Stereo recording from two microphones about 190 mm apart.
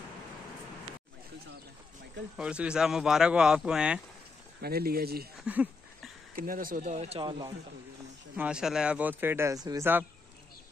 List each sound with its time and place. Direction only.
2.3 s a man's voice: 5° right (ahead or behind)
4.6 s speech: 55° right (ahead or behind)
5.4 s a sound: 5° right (ahead or behind)
6.3 s speech: 45° right (ahead or behind); by 7.5 s 25° right (ahead or behind)
8.4 s speech: 5° right (ahead or behind)